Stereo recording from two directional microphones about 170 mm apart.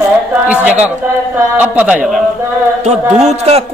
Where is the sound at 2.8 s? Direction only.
40° right (ahead or behind).